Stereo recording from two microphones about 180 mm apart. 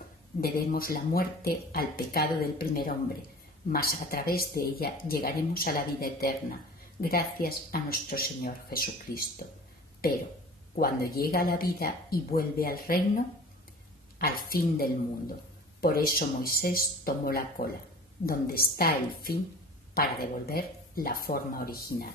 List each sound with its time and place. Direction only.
0.4 s speech: 55° left (ahead or behind)